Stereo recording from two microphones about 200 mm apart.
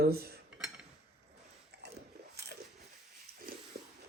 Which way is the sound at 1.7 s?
55° right (ahead or behind).